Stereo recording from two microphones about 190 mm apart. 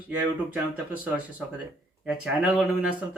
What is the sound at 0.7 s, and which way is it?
Speech, 10° right (ahead or behind).